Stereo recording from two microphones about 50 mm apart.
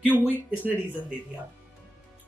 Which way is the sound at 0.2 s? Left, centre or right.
Right.